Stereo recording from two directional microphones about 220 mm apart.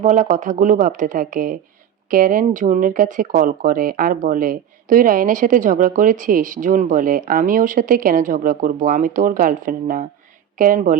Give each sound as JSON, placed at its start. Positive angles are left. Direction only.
{"t": 0.0, "sound": "speech", "side_deg": -35}